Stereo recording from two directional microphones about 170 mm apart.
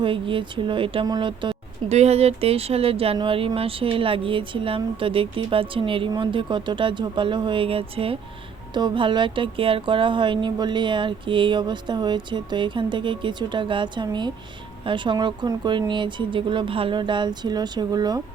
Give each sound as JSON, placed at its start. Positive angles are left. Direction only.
{"t": 0.0, "sound": "speech", "side_deg": -30}